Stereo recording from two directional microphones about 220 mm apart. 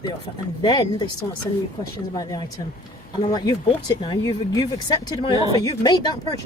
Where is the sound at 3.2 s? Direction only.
20° left (ahead or behind).